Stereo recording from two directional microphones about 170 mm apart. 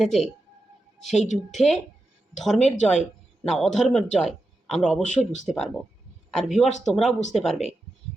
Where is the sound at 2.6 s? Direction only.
45° left (ahead or behind).